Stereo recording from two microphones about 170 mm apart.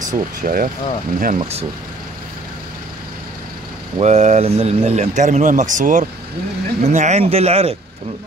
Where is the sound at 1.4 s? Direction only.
35° right (ahead or behind).